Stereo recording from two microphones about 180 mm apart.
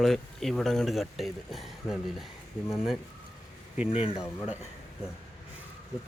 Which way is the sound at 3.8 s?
30° left (ahead or behind).